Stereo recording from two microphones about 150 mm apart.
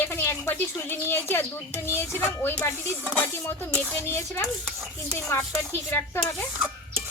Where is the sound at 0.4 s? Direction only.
15° left (ahead or behind).